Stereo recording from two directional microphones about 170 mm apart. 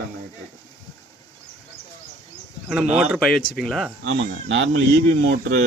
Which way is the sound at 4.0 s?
90° right.